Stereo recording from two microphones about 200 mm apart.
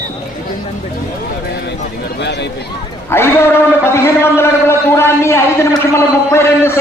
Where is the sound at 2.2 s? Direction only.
60° left (ahead or behind).